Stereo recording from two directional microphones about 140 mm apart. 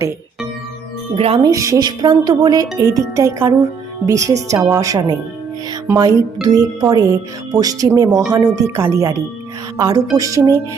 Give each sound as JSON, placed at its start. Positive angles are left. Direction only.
{"t": 1.1, "sound": "speech", "side_deg": -45}
{"t": 1.4, "sound": "speech", "side_deg": -25}